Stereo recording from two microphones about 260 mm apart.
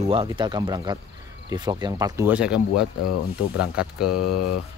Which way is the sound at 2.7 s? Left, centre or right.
Left.